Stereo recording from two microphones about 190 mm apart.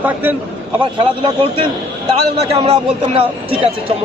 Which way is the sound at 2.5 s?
30° right (ahead or behind).